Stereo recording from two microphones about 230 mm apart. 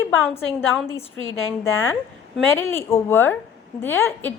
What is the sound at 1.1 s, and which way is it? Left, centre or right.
Speech, left.